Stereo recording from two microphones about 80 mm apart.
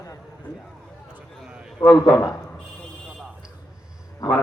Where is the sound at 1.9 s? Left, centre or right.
Centre.